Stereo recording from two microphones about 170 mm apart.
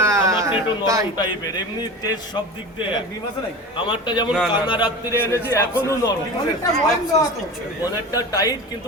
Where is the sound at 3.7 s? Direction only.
30° left (ahead or behind).